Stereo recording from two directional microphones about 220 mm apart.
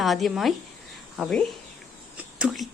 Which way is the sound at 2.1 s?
5° right (ahead or behind).